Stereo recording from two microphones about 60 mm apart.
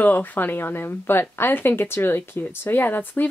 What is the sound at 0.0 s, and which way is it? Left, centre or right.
A woman's voice, left.